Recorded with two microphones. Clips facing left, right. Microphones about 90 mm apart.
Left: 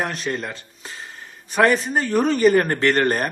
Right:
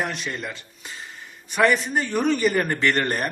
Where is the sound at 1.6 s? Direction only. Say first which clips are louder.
Left 2 dB; 35° left (ahead or behind).